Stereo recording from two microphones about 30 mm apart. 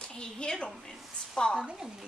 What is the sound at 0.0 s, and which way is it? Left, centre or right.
Speech, left.